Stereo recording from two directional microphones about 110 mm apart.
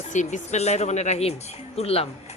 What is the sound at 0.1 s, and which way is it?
Speech, 90° left.